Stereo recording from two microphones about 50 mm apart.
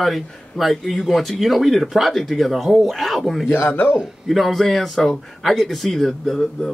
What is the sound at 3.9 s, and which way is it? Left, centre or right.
Speech, centre.